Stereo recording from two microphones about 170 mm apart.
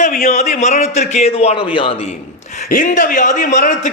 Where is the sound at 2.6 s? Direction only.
55° left (ahead or behind).